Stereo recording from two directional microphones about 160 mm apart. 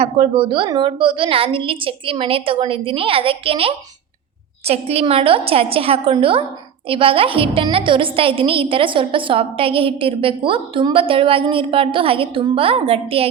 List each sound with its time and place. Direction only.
0.0 s a woman's voice: 35° right (ahead or behind)